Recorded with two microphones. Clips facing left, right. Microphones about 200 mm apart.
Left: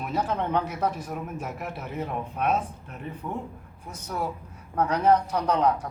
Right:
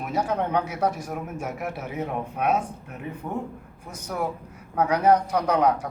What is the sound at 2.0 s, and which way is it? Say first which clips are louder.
Speech: right 1 dB; 10° right (ahead or behind).